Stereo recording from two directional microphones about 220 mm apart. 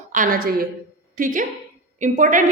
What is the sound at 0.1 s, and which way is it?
A woman's voice, 40° right (ahead or behind).